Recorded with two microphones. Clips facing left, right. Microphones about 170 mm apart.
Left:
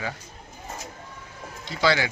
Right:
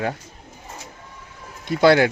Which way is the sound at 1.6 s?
55° right (ahead or behind).